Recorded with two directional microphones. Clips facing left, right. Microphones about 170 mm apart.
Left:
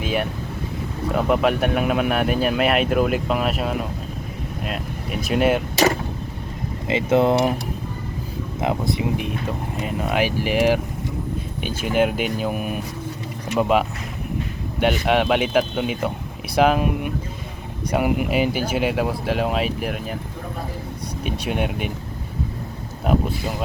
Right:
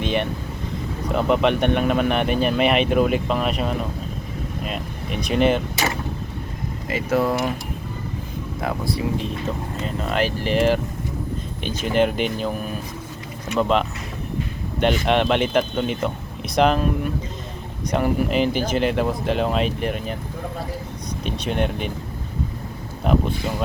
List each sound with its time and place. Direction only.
0.0 s speech: 5° left (ahead or behind)
6.8 s speech: 25° left (ahead or behind)
8.6 s speech: 20° left (ahead or behind); by 20.1 s 5° left (ahead or behind)
21.2 s speech: 10° left (ahead or behind)
23.0 s speech: 5° left (ahead or behind)